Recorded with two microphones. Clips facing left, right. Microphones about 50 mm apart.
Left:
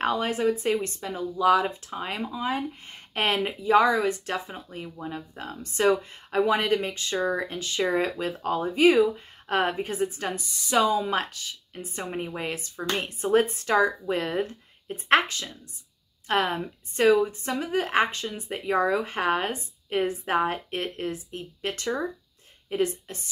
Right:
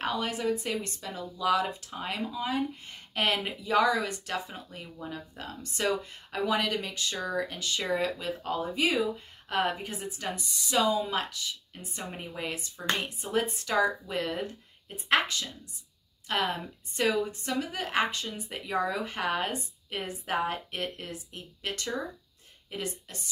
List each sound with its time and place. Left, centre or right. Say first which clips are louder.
0.0 s a woman's voice: left 6 dB; left